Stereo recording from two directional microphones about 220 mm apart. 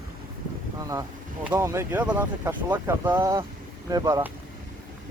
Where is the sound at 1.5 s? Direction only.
10° right (ahead or behind).